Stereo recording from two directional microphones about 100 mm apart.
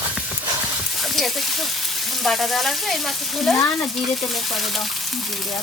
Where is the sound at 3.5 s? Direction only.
30° left (ahead or behind).